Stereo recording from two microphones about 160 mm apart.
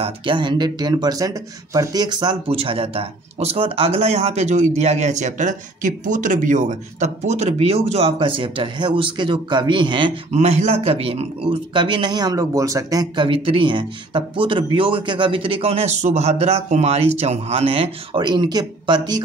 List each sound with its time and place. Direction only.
0.0 s speech: 30° right (ahead or behind)
10.3 s speech: 45° right (ahead or behind); by 19.2 s 25° right (ahead or behind)